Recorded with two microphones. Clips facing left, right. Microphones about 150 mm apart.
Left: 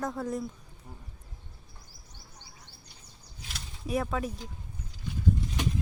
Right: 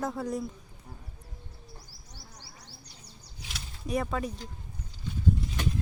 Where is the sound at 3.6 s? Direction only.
Centre (ahead or behind).